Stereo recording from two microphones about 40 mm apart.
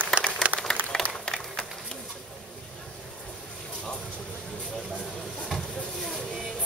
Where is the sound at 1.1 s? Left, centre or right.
Centre.